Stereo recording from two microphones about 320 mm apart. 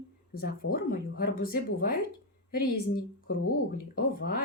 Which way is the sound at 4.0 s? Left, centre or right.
Left.